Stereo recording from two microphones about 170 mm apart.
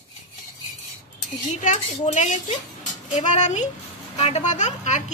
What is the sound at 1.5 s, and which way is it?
A woman's voice, 45° left (ahead or behind).